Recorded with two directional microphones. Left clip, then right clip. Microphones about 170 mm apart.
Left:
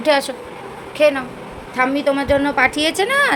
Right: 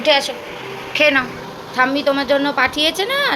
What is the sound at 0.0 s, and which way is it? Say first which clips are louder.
Speech: right 1 dB; 60° left (ahead or behind).